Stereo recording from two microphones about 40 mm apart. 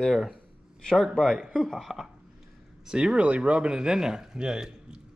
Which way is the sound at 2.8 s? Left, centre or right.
Centre.